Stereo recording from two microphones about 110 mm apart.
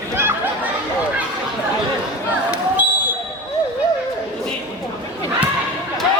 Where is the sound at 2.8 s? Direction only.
15° right (ahead or behind).